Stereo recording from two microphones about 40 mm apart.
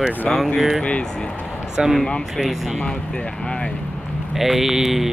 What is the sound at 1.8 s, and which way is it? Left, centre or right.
Speech, centre.